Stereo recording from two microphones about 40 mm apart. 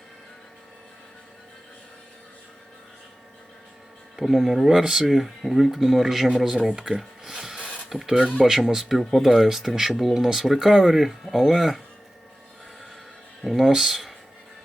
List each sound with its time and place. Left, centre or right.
4.2 s speech: centre
6.3 s speech: centre
13.6 s speech: centre